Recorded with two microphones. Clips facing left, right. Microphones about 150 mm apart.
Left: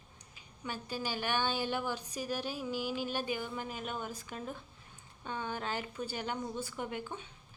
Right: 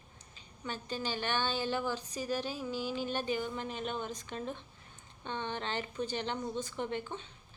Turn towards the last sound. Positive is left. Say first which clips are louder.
# right 2 dB
turn(degrees=10)  # may be behind; listen again after turning